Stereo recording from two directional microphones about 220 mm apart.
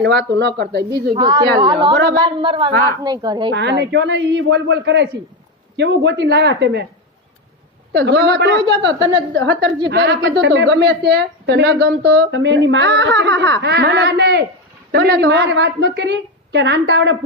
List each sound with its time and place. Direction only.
0.0 s a woman's voice: 50° right (ahead or behind)
1.1 s a woman's voice: 20° right (ahead or behind)
3.5 s a woman's voice: 50° right (ahead or behind)
7.9 s a woman's voice: 50° right (ahead or behind)
8.8 s speech: 20° right (ahead or behind)
9.3 s a woman's voice: 55° right (ahead or behind)